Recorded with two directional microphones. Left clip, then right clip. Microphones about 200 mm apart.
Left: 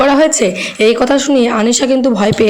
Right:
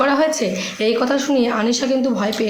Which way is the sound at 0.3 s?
35° left (ahead or behind).